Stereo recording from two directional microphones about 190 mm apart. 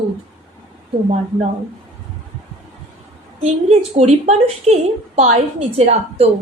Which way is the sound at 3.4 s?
35° right (ahead or behind).